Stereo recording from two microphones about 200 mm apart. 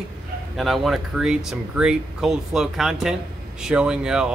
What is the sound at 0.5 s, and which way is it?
Speech, centre (ahead or behind).